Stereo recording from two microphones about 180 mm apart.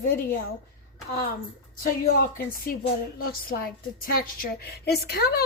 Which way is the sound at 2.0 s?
55° left (ahead or behind).